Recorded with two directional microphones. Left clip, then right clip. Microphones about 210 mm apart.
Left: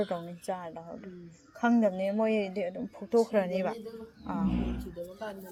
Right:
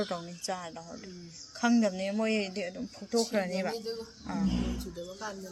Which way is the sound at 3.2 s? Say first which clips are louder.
Left 3 dB; 15° left (ahead or behind).